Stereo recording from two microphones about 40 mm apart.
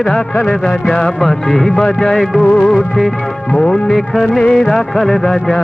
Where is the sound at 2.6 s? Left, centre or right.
Centre.